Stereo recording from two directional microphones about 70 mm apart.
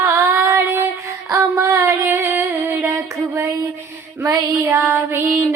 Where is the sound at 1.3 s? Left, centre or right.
Right.